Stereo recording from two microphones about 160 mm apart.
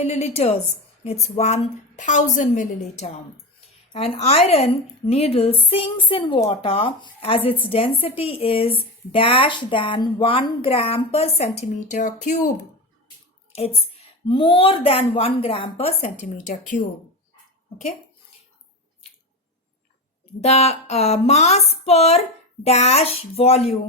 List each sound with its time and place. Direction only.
0.0 s speech: 40° left (ahead or behind)
3.9 s speech: 40° left (ahead or behind); by 12.5 s 55° left (ahead or behind)
13.5 s speech: 40° left (ahead or behind)
16.5 s speech: 55° left (ahead or behind)
20.4 s speech: 40° left (ahead or behind)